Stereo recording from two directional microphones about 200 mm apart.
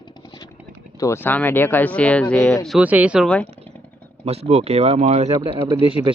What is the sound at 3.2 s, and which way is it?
Speech, 5° left (ahead or behind).